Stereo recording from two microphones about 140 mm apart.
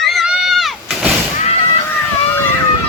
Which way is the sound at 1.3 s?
50° left (ahead or behind).